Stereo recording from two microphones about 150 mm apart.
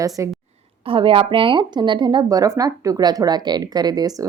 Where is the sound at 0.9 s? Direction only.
35° right (ahead or behind).